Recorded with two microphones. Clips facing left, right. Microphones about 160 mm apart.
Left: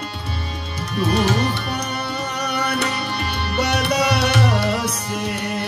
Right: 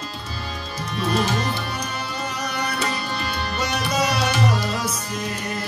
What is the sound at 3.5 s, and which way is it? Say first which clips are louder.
Music: left 5 dB; 65° left (ahead or behind).